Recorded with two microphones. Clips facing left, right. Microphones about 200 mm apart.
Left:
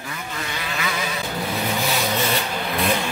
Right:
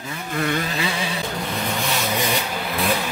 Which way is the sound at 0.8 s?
30° right (ahead or behind).